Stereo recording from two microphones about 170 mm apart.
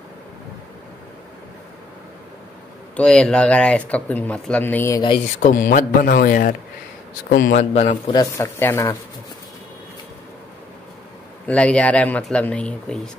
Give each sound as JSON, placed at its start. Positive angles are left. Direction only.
{"t": 3.0, "sound": "speech", "side_deg": 5}
{"t": 5.4, "sound": "a man's voice", "side_deg": 50}
{"t": 7.5, "sound": "a man's voice", "side_deg": 40}
{"t": 8.1, "sound": "speech", "side_deg": 20}
{"t": 11.4, "sound": "speech", "side_deg": 5}